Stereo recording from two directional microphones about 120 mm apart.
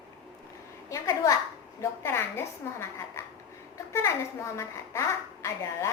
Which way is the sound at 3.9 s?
25° left (ahead or behind).